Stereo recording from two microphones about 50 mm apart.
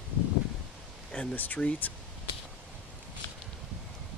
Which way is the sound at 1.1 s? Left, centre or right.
Left.